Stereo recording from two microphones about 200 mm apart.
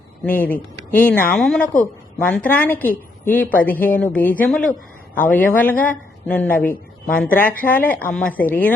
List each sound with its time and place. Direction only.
0.4 s speech: 10° left (ahead or behind)
1.6 s a woman's voice: 40° left (ahead or behind)
2.1 s speech: 5° left (ahead or behind)